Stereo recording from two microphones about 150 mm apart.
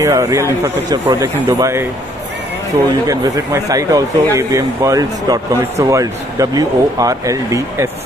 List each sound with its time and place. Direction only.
0.0 s speech: 20° right (ahead or behind)
3.1 s speech: 25° right (ahead or behind)